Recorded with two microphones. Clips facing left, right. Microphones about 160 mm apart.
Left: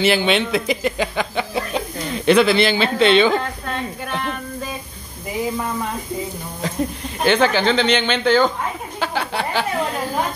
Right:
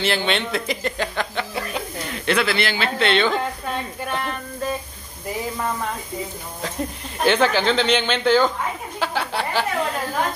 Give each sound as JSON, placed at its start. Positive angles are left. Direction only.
{"t": 0.0, "sound": "speech", "side_deg": 10}
{"t": 2.2, "sound": "speech", "side_deg": 20}
{"t": 4.0, "sound": "speech", "side_deg": 0}
{"t": 7.2, "sound": "speech", "side_deg": 0}
{"t": 9.0, "sound": "a sound", "side_deg": 0}